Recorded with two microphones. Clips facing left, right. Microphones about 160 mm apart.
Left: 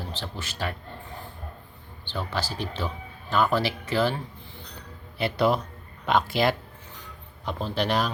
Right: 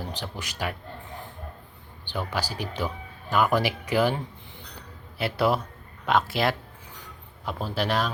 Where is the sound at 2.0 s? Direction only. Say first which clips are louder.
Right 1 dB; 10° right (ahead or behind).